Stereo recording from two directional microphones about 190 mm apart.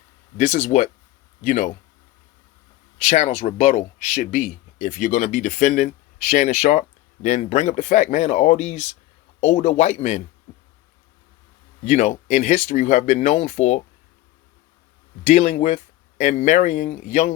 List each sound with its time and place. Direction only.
0.3 s speech: 40° left (ahead or behind)
3.0 s speech: 40° left (ahead or behind)
11.9 s speech: 40° left (ahead or behind)
15.3 s speech: 40° left (ahead or behind)